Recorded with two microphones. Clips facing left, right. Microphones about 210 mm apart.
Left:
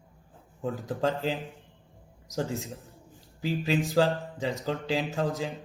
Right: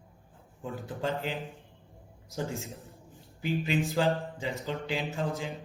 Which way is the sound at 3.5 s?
35° left (ahead or behind).